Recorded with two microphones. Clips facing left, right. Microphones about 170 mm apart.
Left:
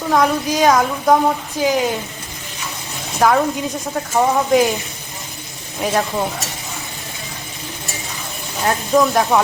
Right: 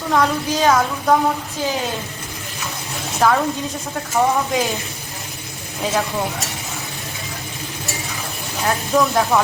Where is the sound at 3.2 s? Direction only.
10° left (ahead or behind).